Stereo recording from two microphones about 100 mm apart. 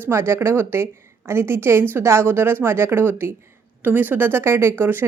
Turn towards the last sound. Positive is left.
turn(degrees=-20)  # may be behind; listen again after turning